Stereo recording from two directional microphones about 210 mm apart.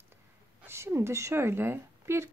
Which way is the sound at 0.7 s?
10° right (ahead or behind).